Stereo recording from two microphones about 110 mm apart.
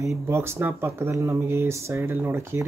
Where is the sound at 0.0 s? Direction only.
25° right (ahead or behind).